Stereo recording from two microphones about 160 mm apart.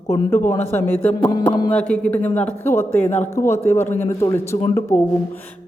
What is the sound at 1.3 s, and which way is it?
Speech, 25° left (ahead or behind).